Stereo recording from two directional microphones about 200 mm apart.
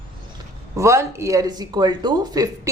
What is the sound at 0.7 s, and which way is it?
Speech, 15° right (ahead or behind).